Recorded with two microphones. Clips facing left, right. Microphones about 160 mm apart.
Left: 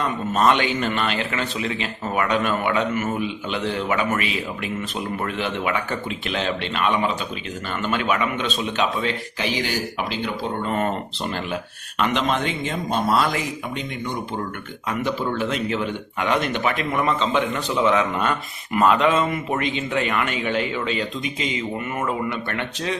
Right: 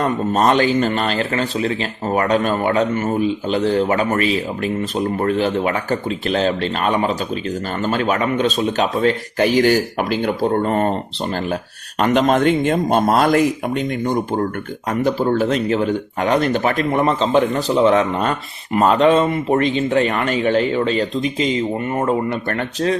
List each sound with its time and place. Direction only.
0.0 s speech: 40° right (ahead or behind)